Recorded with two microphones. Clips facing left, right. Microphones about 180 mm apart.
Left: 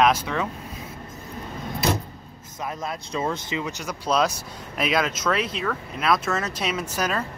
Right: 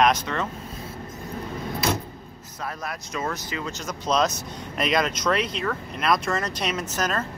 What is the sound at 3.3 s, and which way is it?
Speech, 20° left (ahead or behind).